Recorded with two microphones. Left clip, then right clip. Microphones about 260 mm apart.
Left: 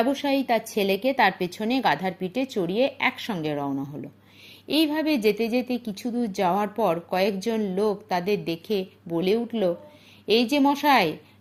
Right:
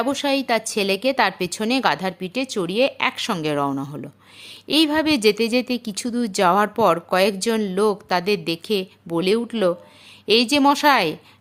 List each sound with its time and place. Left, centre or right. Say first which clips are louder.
0.1 s a woman's voice: right 3 dB; right
3.7 s speech: right 4 dB; right
4.7 s a woman's voice: right 5 dB; right